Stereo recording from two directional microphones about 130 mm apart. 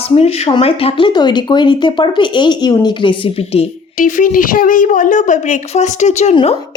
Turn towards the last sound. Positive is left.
turn(degrees=65)  # may be behind; listen again after turning